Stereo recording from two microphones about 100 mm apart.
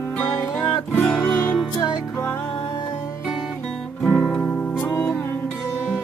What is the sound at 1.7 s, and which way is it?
Music, 45° left (ahead or behind).